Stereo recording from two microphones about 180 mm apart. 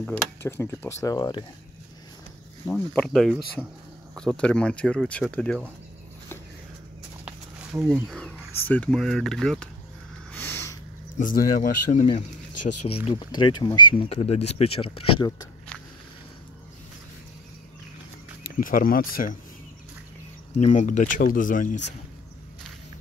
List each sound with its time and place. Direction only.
0.0 s speech: 10° left (ahead or behind)
2.7 s speech: 5° left (ahead or behind)
7.2 s wild animals: 5° right (ahead or behind)
8.2 s speech: 5° left (ahead or behind)
10.3 s a sound: 10° left (ahead or behind)
11.1 s speech: 50° left (ahead or behind); by 15.4 s 25° left (ahead or behind)
18.6 s speech: 50° left (ahead or behind)
20.5 s speech: 40° left (ahead or behind)